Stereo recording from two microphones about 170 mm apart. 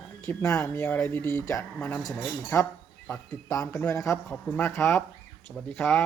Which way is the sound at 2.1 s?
Centre (ahead or behind).